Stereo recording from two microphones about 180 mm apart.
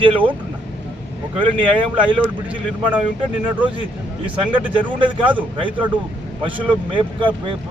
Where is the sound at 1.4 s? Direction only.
30° right (ahead or behind).